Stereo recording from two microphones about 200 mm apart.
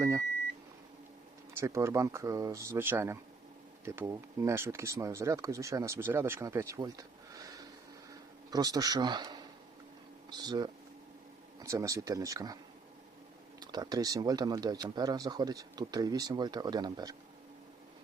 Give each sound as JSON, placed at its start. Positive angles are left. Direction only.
{"t": 1.5, "sound": "speech", "side_deg": -15}
{"t": 13.6, "sound": "speech", "side_deg": -20}